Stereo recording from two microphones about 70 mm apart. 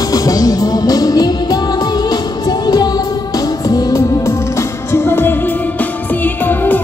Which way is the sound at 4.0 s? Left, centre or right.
Left.